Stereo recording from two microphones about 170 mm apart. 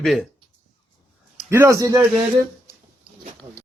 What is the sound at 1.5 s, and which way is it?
Speech, 15° right (ahead or behind).